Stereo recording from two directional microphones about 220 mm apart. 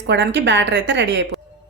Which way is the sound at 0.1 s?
55° right (ahead or behind).